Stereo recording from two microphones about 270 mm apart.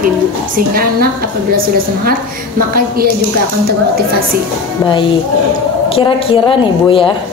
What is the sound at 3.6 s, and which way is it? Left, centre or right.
Speech, right.